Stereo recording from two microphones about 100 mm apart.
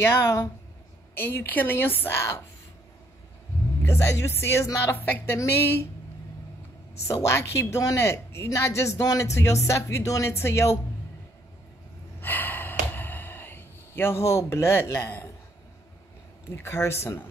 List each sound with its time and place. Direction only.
0.0 s speech: 25° left (ahead or behind)
3.8 s a woman's voice: 30° left (ahead or behind)
4.9 s speech: 20° left (ahead or behind)
7.1 s speech: 30° left (ahead or behind)
12.2 s gasp: 20° left (ahead or behind)
16.5 s speech: 25° left (ahead or behind)